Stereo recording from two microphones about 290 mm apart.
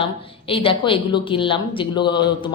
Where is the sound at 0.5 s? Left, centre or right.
Centre.